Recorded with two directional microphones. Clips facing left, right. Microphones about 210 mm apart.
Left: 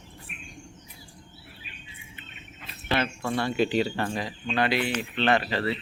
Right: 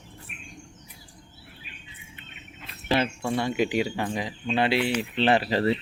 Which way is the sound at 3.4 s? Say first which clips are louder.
Left 1 dB; 15° right (ahead or behind).